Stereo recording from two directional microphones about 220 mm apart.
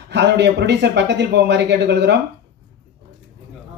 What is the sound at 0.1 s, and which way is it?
Speech, 50° right (ahead or behind).